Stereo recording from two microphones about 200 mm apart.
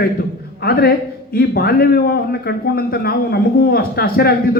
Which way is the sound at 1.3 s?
50° left (ahead or behind).